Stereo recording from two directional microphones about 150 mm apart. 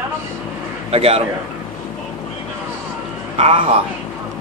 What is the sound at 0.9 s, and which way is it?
Speech, 40° right (ahead or behind).